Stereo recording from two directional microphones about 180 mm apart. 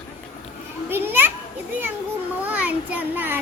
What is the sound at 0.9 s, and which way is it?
Children playing, 10° right (ahead or behind).